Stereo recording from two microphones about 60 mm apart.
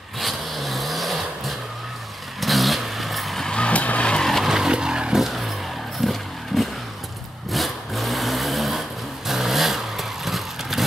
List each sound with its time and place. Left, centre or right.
0.2 s vehicle: centre
3.4 s vehicle: centre
4.3 s vehicle: centre
4.6 s vehicle: centre
5.2 s vehicle: centre